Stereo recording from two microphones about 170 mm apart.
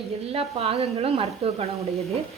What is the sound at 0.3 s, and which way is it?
A woman's voice, 35° right (ahead or behind).